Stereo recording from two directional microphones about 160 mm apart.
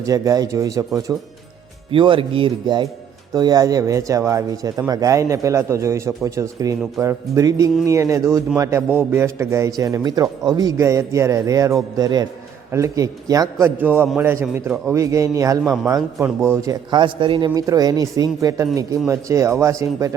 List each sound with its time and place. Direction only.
0.0 s a man's voice: 20° right (ahead or behind)
1.9 s a man's voice: 35° right (ahead or behind)
15.6 s speech: centre (ahead or behind)
16.2 s a man's voice: 15° right (ahead or behind)